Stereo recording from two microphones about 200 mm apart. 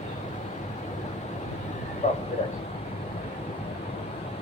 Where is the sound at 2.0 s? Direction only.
35° left (ahead or behind).